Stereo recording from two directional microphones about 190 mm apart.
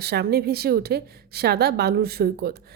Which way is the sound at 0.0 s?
60° right (ahead or behind).